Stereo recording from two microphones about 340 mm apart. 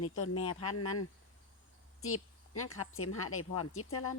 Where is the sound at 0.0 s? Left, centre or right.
Left.